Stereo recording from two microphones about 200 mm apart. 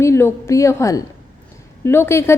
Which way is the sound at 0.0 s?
10° left (ahead or behind).